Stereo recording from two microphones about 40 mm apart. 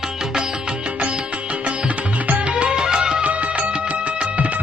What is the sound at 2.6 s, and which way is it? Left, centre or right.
Music, right.